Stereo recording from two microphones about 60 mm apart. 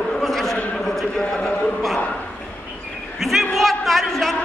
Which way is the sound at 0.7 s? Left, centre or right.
Centre.